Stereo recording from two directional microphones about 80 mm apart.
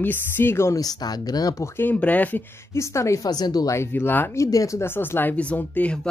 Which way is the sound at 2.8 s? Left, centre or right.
Left.